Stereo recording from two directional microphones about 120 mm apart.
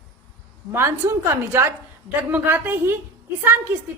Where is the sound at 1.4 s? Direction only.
20° right (ahead or behind).